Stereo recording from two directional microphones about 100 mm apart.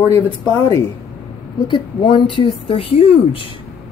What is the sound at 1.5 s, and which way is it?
Speech, 50° left (ahead or behind).